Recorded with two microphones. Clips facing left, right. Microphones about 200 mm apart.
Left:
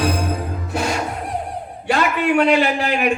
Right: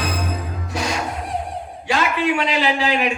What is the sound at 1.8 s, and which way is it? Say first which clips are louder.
A man's voice: left 2 dB; 55° left (ahead or behind).